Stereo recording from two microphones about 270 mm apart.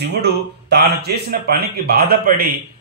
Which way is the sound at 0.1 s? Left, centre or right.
Right.